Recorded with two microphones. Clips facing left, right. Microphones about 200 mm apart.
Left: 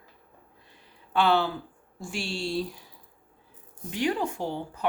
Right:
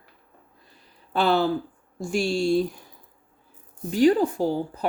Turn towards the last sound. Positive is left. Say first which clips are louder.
# right 7 dB
turn(degrees=-35)  # may be behind; listen again after turning